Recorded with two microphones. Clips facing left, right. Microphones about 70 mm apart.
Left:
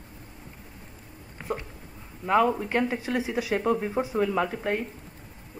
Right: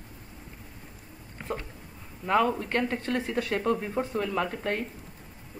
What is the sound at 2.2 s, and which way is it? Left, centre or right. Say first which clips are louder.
Speech: left 2 dB; centre.